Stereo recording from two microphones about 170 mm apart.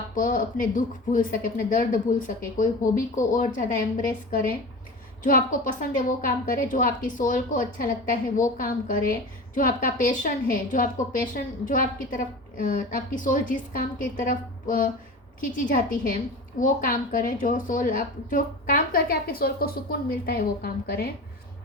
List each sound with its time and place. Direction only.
0.2 s a woman's voice: 50° left (ahead or behind)